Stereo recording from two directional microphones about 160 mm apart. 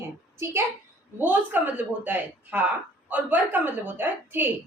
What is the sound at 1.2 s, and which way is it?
A woman's voice, 10° right (ahead or behind).